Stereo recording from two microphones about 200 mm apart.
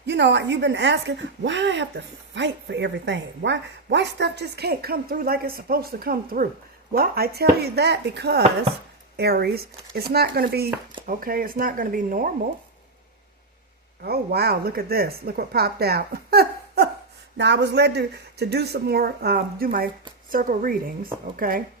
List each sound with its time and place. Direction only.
0.0 s speech: 60° right (ahead or behind); by 12.3 s 45° right (ahead or behind)
14.0 s speech: 50° right (ahead or behind)